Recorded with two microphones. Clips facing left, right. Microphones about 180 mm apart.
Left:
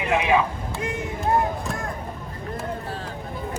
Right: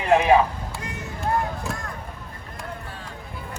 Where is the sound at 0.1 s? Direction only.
40° right (ahead or behind).